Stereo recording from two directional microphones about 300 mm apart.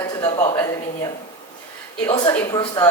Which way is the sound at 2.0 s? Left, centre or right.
Centre.